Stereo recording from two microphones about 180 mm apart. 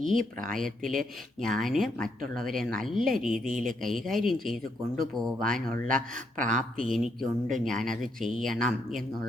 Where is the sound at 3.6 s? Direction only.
50° right (ahead or behind).